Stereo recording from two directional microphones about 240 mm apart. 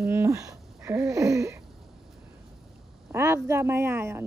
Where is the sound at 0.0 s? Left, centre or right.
Centre.